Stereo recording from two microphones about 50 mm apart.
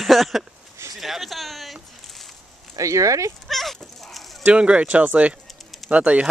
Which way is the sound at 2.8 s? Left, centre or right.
Right.